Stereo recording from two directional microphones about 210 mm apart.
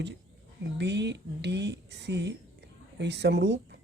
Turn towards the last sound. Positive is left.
turn(degrees=-55)  # may be behind; listen again after turning